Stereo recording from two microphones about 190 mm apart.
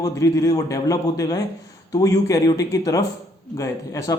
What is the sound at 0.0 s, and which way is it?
Speech, 15° left (ahead or behind).